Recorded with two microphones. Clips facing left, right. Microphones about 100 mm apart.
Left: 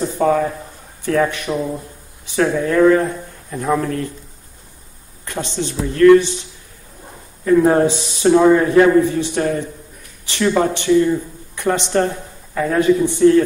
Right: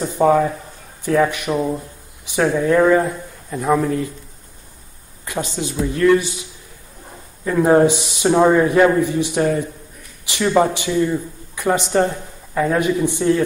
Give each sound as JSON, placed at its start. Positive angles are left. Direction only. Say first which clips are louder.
{"t": 0.0, "sound": "a man's voice", "louder": "right 1 dB", "side_deg": -15}
{"t": 5.2, "sound": "a man's voice", "louder": "even", "side_deg": -5}
{"t": 7.4, "sound": "a man's voice", "louder": "left 1 dB", "side_deg": -20}
{"t": 12.5, "sound": "a man's voice", "louder": "left 3 dB", "side_deg": -15}